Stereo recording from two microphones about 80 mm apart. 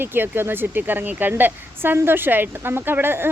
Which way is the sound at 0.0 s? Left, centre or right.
Right.